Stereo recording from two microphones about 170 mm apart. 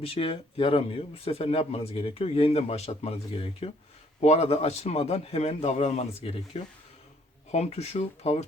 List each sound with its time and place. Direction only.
0.0 s a man's voice: 35° left (ahead or behind)